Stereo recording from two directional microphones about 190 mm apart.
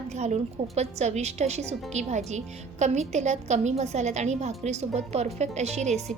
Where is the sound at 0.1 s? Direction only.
35° right (ahead or behind).